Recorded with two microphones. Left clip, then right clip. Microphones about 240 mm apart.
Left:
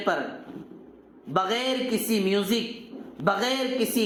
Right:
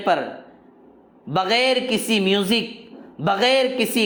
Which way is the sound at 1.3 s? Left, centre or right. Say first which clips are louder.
Right 7 dB; right.